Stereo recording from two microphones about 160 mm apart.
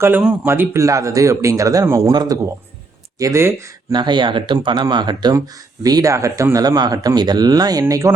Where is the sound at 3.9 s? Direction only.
25° right (ahead or behind).